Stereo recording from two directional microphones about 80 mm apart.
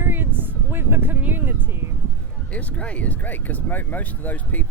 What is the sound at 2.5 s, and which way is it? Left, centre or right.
Speech, centre.